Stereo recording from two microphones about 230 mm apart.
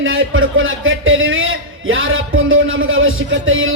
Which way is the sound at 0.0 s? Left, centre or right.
Right.